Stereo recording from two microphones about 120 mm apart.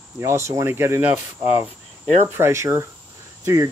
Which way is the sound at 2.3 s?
20° right (ahead or behind).